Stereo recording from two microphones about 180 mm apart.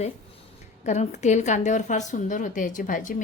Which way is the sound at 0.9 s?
40° left (ahead or behind).